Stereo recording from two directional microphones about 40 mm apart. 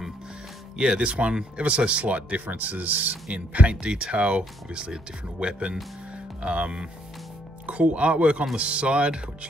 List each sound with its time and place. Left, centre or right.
0.7 s speech: right
3.3 s speech: right